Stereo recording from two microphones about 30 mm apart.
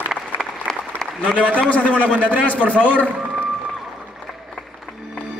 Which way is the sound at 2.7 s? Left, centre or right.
Left.